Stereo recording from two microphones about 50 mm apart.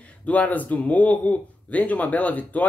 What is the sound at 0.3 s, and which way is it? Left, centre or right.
Speech, left.